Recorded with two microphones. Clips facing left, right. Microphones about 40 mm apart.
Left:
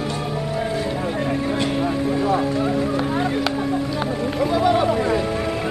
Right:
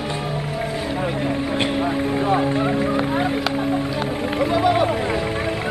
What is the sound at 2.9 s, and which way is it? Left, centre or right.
Speech, centre.